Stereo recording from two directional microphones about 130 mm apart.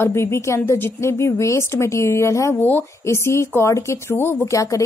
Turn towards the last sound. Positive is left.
turn(degrees=25)  # may be behind; listen again after turning